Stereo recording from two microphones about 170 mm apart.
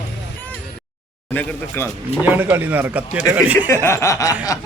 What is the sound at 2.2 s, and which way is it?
Speech, 10° right (ahead or behind).